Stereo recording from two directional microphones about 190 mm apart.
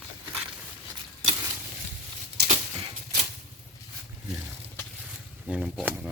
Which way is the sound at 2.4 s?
60° right (ahead or behind).